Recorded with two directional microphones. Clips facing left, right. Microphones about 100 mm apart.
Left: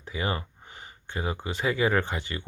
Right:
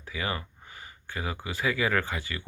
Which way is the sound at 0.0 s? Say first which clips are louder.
Left 2 dB; 25° left (ahead or behind).